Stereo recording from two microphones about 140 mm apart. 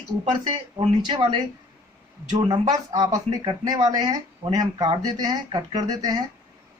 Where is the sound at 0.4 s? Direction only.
35° right (ahead or behind).